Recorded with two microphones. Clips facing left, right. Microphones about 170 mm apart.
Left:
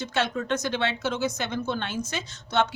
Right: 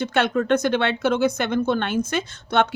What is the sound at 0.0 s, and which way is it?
Speech, 60° right (ahead or behind).